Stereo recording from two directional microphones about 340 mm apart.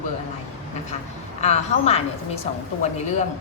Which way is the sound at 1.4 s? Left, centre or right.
Centre.